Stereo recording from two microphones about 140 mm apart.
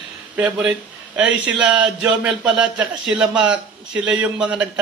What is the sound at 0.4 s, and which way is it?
A man's voice, 5° right (ahead or behind).